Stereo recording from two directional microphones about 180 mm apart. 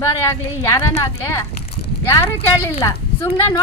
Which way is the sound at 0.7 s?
15° left (ahead or behind).